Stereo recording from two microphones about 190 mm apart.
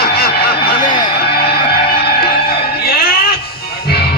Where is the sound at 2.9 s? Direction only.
50° left (ahead or behind).